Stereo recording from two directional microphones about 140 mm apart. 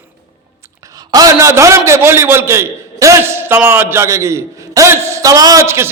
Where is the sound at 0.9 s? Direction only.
25° right (ahead or behind).